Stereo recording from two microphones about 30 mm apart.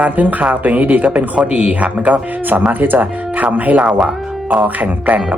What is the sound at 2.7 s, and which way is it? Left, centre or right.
Speech, right.